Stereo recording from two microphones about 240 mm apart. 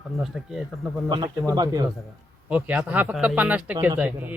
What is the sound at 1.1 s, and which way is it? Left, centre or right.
Speech, centre.